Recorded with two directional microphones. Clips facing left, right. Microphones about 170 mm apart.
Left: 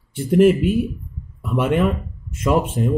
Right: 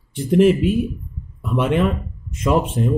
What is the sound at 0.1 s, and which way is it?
Speech, 5° left (ahead or behind).